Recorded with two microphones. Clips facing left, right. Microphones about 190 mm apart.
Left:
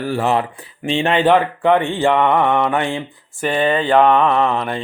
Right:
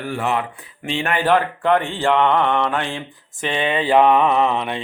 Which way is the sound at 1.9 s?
15° left (ahead or behind).